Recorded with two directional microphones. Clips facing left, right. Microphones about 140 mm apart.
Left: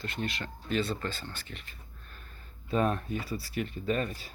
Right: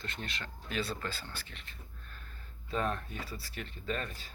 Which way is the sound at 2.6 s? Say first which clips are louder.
Left 6 dB; 15° left (ahead or behind).